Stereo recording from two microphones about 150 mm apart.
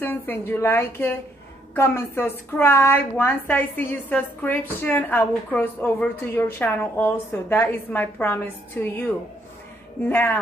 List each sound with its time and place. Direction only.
0.0 s a woman's voice: 15° left (ahead or behind)
10.0 s a woman's voice: 15° left (ahead or behind)